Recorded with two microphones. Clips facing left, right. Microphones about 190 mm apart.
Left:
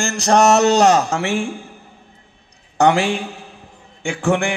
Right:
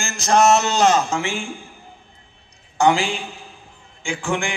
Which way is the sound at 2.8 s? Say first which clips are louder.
Left 3 dB; 65° left (ahead or behind).